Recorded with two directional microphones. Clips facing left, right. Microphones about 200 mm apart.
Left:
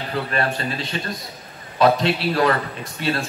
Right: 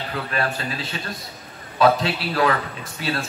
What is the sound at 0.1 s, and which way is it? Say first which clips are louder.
A man's voice: left 3 dB; centre (ahead or behind).